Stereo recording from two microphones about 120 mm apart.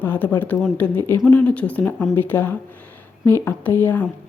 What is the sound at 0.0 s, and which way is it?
Speech, 15° left (ahead or behind).